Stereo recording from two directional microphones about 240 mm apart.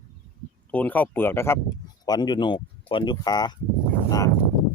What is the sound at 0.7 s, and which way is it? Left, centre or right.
Speech, centre.